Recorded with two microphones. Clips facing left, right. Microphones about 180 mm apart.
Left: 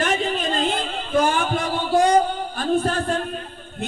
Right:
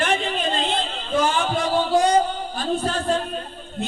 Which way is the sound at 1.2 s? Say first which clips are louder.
Even; 50° left (ahead or behind).